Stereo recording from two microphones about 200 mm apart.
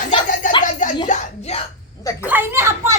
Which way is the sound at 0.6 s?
40° left (ahead or behind).